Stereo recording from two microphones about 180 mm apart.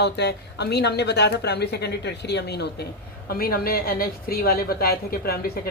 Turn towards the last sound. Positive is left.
turn(degrees=55)  # may be behind; listen again after turning